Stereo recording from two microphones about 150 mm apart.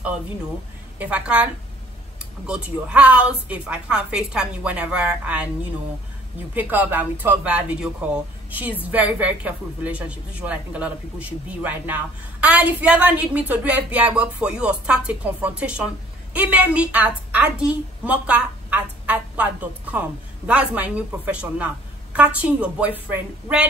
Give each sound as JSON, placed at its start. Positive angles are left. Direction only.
{"t": 0.9, "sound": "a woman's voice", "side_deg": -10}
{"t": 6.5, "sound": "a woman's voice", "side_deg": -10}